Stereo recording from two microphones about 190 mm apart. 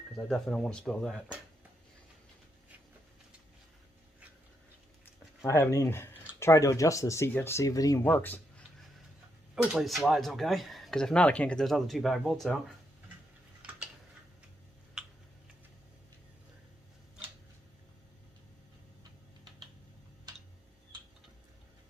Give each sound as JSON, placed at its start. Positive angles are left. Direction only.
{"t": 0.3, "sound": "speech", "side_deg": 0}
{"t": 5.0, "sound": "speech", "side_deg": 10}
{"t": 9.6, "sound": "speech", "side_deg": -5}